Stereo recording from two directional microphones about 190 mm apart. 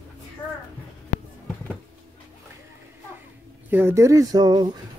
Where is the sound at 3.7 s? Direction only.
10° right (ahead or behind).